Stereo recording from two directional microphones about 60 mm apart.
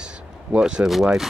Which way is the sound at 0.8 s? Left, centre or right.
Centre.